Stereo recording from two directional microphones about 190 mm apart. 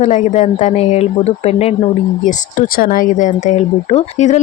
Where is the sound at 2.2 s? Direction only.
45° left (ahead or behind).